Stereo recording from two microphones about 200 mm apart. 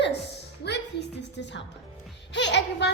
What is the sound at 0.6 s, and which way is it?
A woman's voice, 55° left (ahead or behind).